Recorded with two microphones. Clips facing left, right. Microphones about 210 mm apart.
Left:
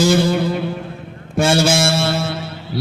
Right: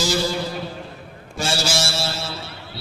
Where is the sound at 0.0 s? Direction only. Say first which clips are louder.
Left 8 dB; 55° left (ahead or behind).